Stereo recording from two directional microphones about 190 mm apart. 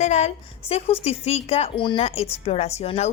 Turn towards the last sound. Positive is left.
turn(degrees=35)  # may be behind; listen again after turning